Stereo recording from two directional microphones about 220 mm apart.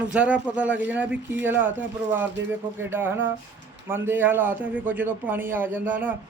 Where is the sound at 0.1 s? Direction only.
5° right (ahead or behind).